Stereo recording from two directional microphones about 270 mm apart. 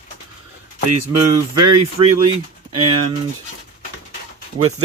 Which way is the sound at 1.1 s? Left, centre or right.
Right.